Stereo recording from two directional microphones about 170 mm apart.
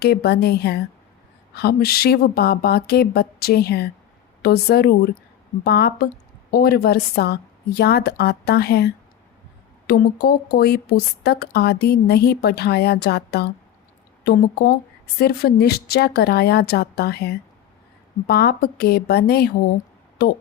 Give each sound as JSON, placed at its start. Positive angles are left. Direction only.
{"t": 0.0, "sound": "a woman's voice", "side_deg": 70}